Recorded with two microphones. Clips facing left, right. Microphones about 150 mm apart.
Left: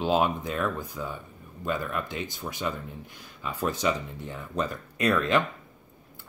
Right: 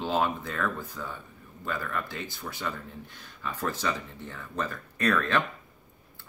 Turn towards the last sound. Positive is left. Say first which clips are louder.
# left 2 dB
turn(degrees=15)  # may be behind; listen again after turning